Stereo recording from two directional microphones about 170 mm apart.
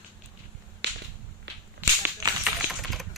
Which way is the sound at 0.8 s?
85° right.